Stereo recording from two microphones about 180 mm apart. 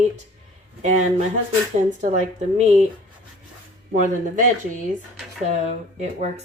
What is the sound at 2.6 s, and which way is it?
Speech, 40° right (ahead or behind).